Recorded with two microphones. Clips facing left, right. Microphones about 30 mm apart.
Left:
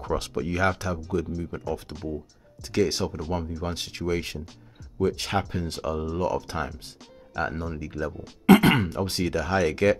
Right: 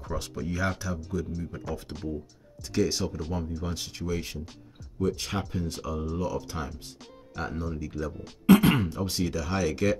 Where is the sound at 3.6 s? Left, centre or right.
Left.